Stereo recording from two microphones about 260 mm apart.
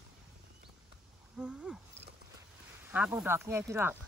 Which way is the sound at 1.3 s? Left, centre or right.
Centre.